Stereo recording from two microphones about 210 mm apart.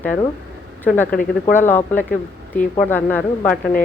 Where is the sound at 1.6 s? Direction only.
10° left (ahead or behind).